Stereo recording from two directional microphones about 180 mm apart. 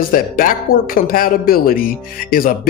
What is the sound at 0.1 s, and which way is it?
Speech, 50° left (ahead or behind).